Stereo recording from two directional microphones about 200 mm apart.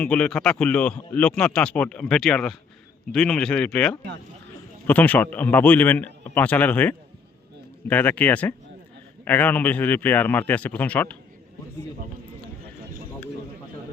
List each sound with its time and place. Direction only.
0.0 s a man's voice: 5° left (ahead or behind)